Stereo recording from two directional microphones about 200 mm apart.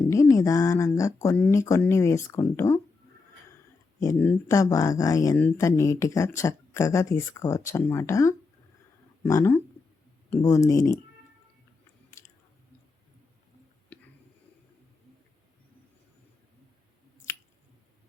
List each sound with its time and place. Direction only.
0.1 s speech: 15° left (ahead or behind)
4.0 s speech: 10° left (ahead or behind)